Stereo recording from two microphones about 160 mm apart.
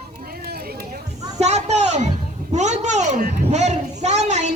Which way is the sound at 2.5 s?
45° right (ahead or behind).